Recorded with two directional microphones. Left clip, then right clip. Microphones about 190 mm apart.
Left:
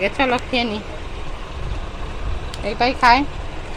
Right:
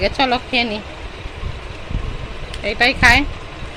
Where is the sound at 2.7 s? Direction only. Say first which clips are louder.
Right 2 dB; 10° right (ahead or behind).